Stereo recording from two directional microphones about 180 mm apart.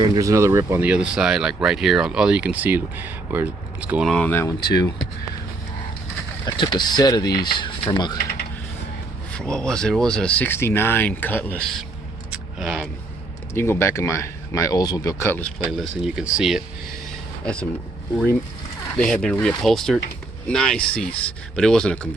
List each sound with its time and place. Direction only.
0.0 s speech: 20° right (ahead or behind)
4.1 s speech: 10° left (ahead or behind)
4.7 s speech: 20° left (ahead or behind)
6.4 s speech: 25° left (ahead or behind)
9.3 s speech: 5° left (ahead or behind)
12.3 s a sound: centre (ahead or behind)
13.5 s speech: 15° left (ahead or behind)
15.6 s a man's voice: centre (ahead or behind)
18.9 s a man's voice: 5° left (ahead or behind)